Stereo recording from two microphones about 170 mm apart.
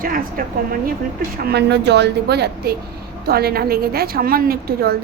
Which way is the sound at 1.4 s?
75° right (ahead or behind).